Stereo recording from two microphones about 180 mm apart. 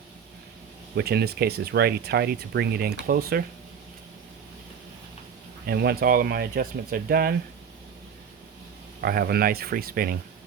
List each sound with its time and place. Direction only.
0.9 s speech: 65° right (ahead or behind)
5.6 s speech: 60° right (ahead or behind)
9.0 s speech: 60° right (ahead or behind)